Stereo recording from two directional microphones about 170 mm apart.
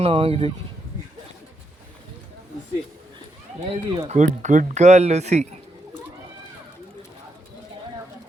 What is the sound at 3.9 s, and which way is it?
Speech, 40° right (ahead or behind).